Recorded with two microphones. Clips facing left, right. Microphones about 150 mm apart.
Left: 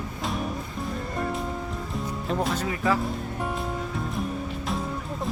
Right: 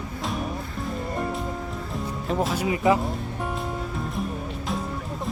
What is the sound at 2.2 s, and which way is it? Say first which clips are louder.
Speech: right 3 dB; 5° right (ahead or behind).